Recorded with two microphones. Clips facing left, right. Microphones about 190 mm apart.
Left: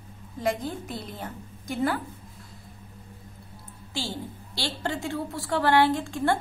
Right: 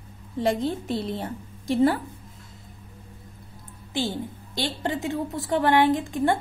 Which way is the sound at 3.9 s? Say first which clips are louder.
Right 6 dB; 20° right (ahead or behind).